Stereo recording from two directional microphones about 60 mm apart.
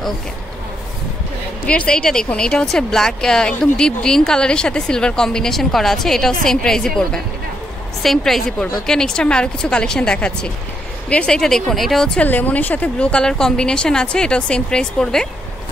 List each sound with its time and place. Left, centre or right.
1.7 s speech: centre
8.0 s speech: centre
12.2 s a woman's voice: left
13.2 s speech: centre